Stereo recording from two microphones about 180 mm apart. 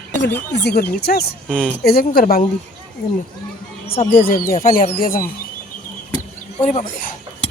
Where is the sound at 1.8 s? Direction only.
60° left (ahead or behind).